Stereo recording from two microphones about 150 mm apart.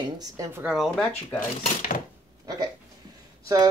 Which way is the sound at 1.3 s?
65° left (ahead or behind).